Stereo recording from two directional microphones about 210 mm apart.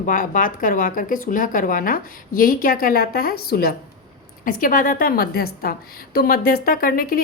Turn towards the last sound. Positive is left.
turn(degrees=45)  # may be behind; listen again after turning